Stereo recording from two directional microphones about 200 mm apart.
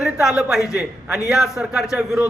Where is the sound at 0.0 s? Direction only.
5° right (ahead or behind).